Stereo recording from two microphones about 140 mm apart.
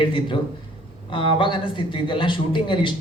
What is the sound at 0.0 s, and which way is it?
A man's voice, 35° left (ahead or behind).